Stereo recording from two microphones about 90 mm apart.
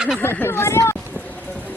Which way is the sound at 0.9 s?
15° left (ahead or behind).